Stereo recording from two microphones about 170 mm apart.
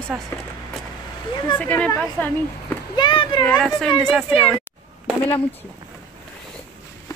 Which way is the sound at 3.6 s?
Centre (ahead or behind).